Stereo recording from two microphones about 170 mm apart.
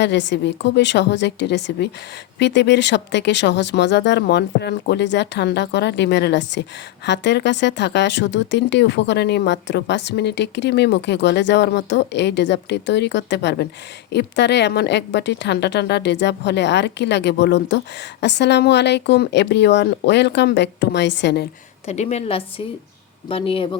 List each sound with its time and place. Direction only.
0.0 s speech: 90° left
21.8 s a woman's voice: 40° left (ahead or behind)